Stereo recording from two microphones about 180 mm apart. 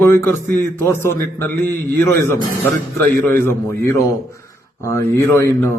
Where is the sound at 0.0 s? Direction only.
10° left (ahead or behind).